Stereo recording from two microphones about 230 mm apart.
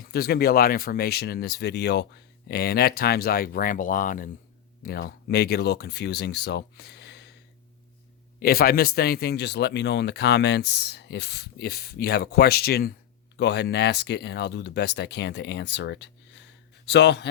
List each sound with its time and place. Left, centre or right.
0.0 s speech: left
8.4 s speech: left